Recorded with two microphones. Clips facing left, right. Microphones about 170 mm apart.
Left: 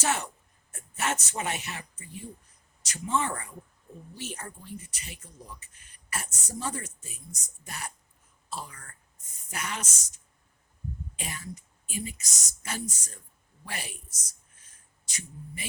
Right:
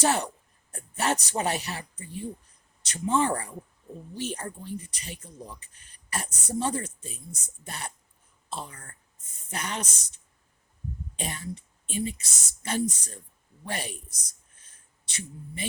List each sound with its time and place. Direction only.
0.0 s speech: 35° right (ahead or behind)
11.2 s speech: 35° right (ahead or behind)
14.6 s a sound: 30° right (ahead or behind)